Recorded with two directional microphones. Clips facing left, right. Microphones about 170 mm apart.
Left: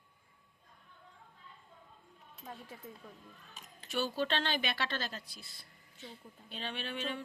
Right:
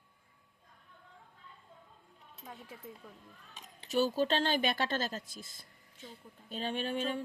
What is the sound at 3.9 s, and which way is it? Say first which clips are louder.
Speech: right 5 dB; 40° right (ahead or behind).